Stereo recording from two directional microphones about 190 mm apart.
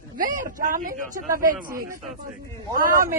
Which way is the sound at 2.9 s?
15° right (ahead or behind).